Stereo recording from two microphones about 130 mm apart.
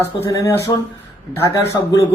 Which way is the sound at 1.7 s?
25° left (ahead or behind).